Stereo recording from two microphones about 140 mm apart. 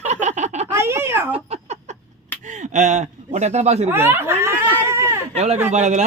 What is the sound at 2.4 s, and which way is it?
Speech, 60° right (ahead or behind).